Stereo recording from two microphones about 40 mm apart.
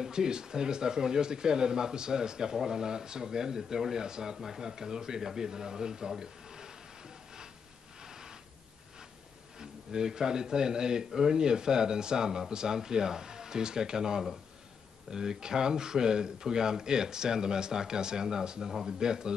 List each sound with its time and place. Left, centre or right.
0.0 s speech: centre
8.0 s a sound: centre
9.6 s speech: centre